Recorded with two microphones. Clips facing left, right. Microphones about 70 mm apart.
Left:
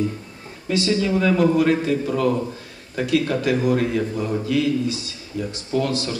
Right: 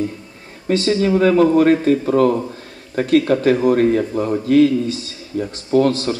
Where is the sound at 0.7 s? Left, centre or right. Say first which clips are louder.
Right 4 dB; right.